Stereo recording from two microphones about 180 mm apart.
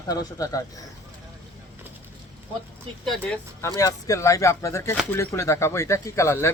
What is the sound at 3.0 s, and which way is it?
Speech, 5° left (ahead or behind).